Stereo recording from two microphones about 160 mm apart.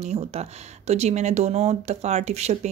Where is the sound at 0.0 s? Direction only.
45° right (ahead or behind).